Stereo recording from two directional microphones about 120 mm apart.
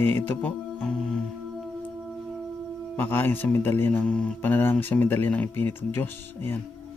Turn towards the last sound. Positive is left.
turn(degrees=20)  # may be behind; listen again after turning